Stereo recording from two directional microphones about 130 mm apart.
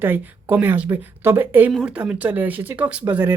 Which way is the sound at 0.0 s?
15° right (ahead or behind).